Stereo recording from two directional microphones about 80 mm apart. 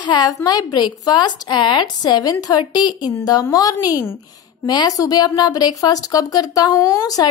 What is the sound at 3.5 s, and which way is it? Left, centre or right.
A woman's voice, left.